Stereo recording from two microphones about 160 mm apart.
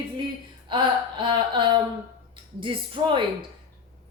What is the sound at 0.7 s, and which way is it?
A woman's voice, 30° right (ahead or behind).